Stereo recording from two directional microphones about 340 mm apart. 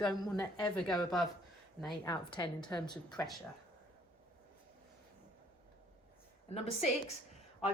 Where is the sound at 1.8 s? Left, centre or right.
Centre.